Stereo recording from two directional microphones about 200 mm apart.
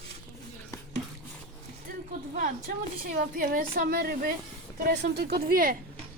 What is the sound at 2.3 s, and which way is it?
A woman's voice, 40° right (ahead or behind).